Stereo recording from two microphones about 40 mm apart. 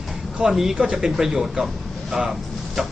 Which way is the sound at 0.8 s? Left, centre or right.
Right.